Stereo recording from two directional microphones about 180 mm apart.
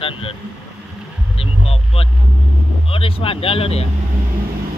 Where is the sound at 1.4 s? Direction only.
35° left (ahead or behind).